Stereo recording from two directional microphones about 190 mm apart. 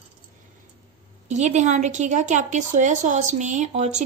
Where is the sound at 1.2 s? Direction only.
40° right (ahead or behind).